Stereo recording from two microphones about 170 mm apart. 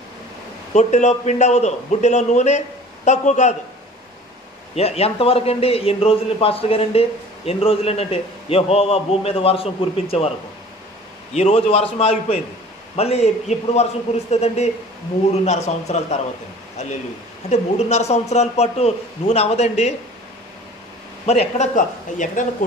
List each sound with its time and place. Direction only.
0.7 s a man's voice: 45° left (ahead or behind)
4.7 s a man's voice: 35° left (ahead or behind)
11.3 s a man's voice: 35° left (ahead or behind)
17.5 s a man's voice: 40° left (ahead or behind)
21.3 s a man's voice: 40° left (ahead or behind)